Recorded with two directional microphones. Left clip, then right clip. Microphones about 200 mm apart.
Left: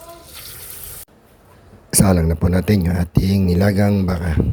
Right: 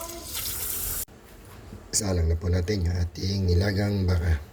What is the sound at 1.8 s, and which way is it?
Speech, 35° left (ahead or behind).